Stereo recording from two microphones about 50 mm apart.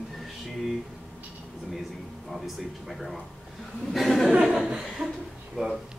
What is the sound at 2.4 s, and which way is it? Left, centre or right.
Speech, centre.